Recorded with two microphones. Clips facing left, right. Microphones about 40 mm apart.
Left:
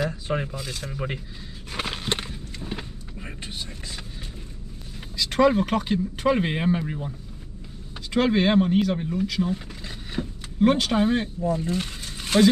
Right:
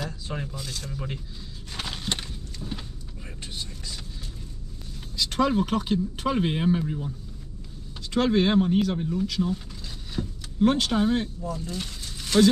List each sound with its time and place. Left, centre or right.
0.1 s a man's voice: left
0.6 s speech: centre
0.9 s a man's voice: left
1.7 s a sound: left
5.1 s speech: centre
5.5 s a man's voice: centre; by 7.2 s left
8.1 s a man's voice: centre
9.4 s a sound: left
10.6 s a man's voice: centre
11.4 s speech: left